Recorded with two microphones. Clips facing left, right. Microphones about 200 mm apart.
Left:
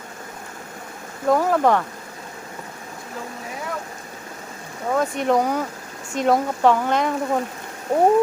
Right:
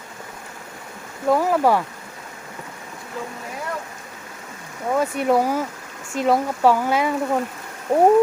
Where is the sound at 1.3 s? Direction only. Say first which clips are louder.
Even; 5° right (ahead or behind).